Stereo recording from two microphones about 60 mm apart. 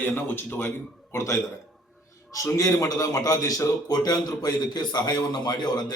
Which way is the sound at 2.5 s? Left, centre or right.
Left.